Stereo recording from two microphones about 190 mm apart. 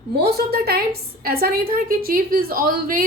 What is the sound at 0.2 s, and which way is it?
A woman's voice, 55° right (ahead or behind).